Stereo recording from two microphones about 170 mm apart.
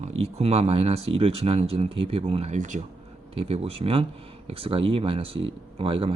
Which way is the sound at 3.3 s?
35° right (ahead or behind).